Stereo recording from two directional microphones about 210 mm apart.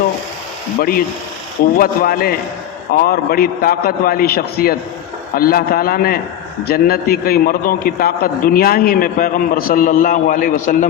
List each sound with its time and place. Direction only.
0.8 s a man's voice: 45° left (ahead or behind)